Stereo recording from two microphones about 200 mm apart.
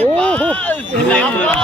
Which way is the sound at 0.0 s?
5° left (ahead or behind).